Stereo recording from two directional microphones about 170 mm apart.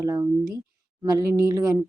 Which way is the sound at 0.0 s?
20° right (ahead or behind).